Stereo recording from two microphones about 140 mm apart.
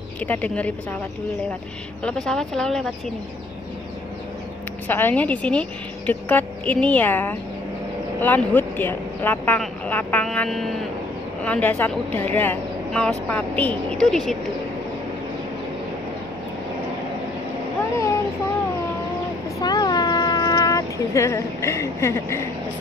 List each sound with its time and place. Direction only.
0.2 s a woman's voice: 10° left (ahead or behind)
2.0 s speech: 5° left (ahead or behind)
4.8 s a woman's voice: 15° left (ahead or behind)
19.6 s cat: 30° left (ahead or behind)